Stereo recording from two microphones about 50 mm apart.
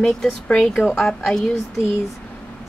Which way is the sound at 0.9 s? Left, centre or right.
Centre.